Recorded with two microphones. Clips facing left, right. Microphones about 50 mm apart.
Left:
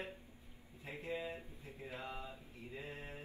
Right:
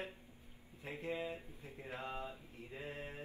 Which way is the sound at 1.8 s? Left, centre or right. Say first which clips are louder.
Right 2 dB; right.